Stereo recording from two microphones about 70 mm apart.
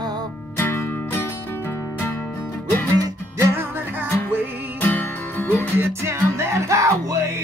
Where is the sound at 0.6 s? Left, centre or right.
Left.